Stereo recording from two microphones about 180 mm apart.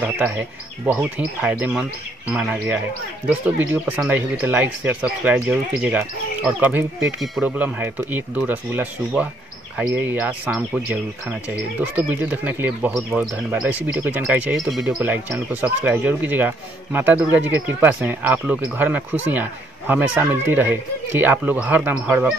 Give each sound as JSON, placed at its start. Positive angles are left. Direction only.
{"t": 0.9, "sound": "speech", "side_deg": -5}